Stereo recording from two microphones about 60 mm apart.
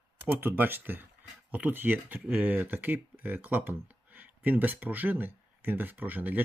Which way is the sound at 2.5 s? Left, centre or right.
Right.